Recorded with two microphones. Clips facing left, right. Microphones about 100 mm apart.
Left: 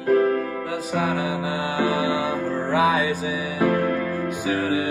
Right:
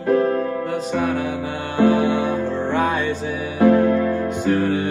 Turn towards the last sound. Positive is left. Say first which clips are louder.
# right 4 dB
turn(degrees=5)  # may be behind; listen again after turning